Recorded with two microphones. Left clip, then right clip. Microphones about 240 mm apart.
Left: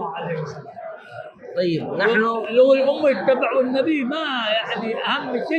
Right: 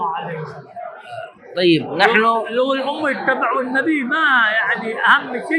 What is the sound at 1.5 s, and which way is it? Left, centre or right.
Speech, right.